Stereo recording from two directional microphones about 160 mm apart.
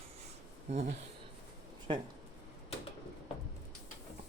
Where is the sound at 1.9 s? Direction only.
30° right (ahead or behind).